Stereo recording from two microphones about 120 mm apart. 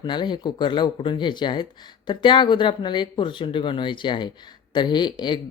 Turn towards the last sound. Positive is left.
turn(degrees=40)  # may be behind; listen again after turning